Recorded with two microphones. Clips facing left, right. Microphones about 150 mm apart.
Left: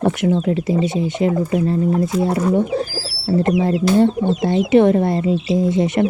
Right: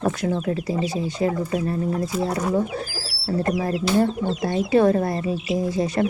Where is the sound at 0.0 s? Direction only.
25° left (ahead or behind).